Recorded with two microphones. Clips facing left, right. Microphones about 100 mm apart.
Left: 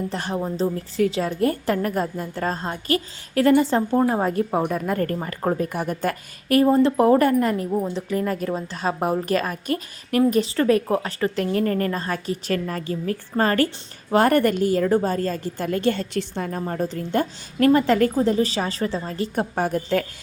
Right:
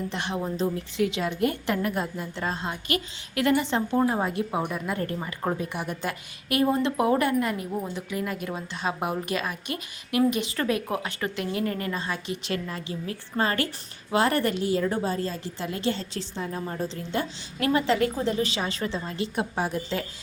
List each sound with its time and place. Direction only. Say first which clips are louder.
0.1 s a woman's voice: left 3 dB; 40° left (ahead or behind)
7.7 s a woman's voice: left 7 dB; 25° left (ahead or behind)
8.1 s a woman's voice: left 7 dB; 40° left (ahead or behind); by 16.6 s 55° left (ahead or behind)
16.6 s a woman's voice: left 5 dB; 45° left (ahead or behind)